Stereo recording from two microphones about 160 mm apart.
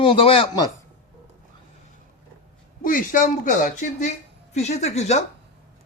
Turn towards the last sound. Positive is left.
turn(degrees=45)  # may be behind; listen again after turning